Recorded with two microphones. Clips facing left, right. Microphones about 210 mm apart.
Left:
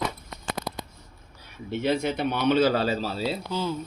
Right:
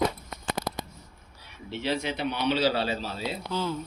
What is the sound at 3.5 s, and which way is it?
Speech, 15° left (ahead or behind).